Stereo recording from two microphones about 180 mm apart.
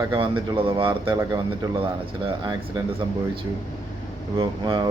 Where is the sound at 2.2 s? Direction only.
25° right (ahead or behind).